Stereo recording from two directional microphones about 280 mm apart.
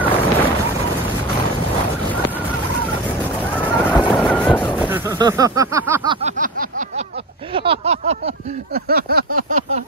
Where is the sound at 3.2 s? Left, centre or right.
Centre.